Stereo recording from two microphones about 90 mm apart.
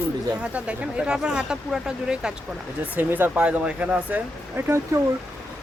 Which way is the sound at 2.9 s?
20° right (ahead or behind).